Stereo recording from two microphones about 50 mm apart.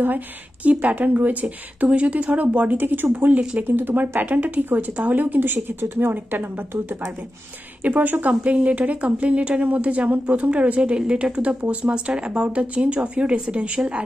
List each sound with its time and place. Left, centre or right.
0.7 s a woman's voice: right
7.8 s speech: right